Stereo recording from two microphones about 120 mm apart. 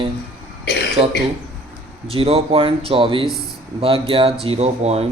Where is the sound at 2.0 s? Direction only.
50° right (ahead or behind).